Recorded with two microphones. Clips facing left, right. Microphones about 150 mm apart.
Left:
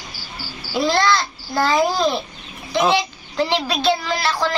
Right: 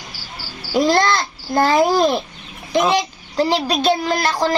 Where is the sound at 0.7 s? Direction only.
45° right (ahead or behind).